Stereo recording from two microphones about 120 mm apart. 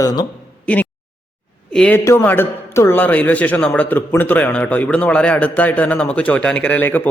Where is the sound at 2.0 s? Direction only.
20° left (ahead or behind).